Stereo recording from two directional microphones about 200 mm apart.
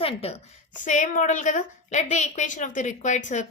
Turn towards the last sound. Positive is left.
turn(degrees=35)  # may be behind; listen again after turning